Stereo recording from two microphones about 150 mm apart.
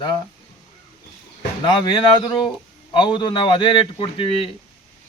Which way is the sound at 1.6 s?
30° left (ahead or behind).